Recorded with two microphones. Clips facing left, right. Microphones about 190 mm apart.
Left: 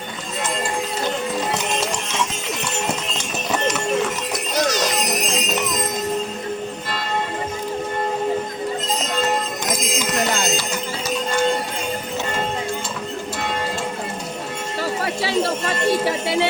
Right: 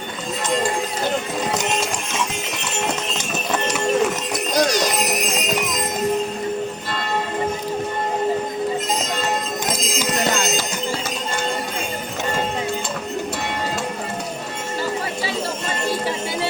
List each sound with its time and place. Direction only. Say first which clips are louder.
4.5 s music: right 2 dB; 10° right (ahead or behind)
14.8 s music: left 2 dB; 70° left (ahead or behind)